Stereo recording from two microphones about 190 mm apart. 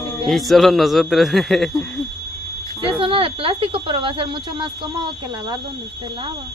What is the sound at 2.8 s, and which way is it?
Speech, 25° right (ahead or behind).